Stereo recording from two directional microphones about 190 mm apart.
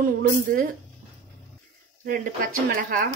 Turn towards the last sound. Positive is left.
turn(degrees=-50)  # may be behind; listen again after turning